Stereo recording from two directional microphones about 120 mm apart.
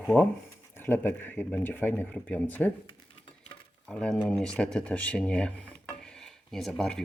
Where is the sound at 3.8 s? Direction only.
5° left (ahead or behind).